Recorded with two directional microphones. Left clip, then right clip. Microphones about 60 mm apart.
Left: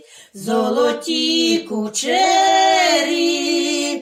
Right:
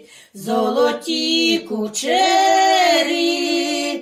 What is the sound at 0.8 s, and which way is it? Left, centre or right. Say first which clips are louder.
Music: left 1 dB; right.